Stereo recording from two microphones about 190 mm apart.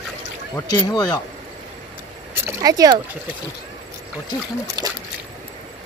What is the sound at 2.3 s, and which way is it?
Speech, 15° right (ahead or behind).